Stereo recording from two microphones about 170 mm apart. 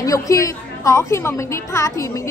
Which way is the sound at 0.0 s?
20° left (ahead or behind).